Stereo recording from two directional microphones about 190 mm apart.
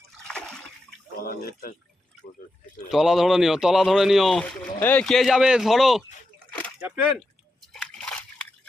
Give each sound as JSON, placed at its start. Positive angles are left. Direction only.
{"t": 0.3, "sound": "splash", "side_deg": 5}
{"t": 1.2, "sound": "speech", "side_deg": 50}
{"t": 2.9, "sound": "speech", "side_deg": 0}
{"t": 7.7, "sound": "slosh", "side_deg": 5}